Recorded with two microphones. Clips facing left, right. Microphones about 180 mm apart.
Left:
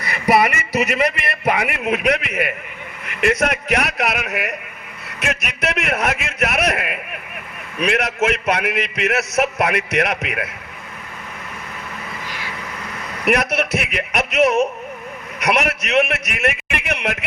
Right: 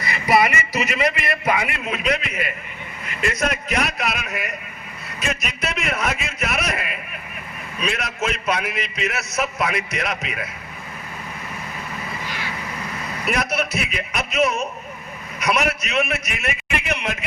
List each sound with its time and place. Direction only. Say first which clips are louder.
0.0 s a man's voice: left 2 dB; 65° left (ahead or behind)
13.2 s a man's voice: left 5 dB; 70° left (ahead or behind)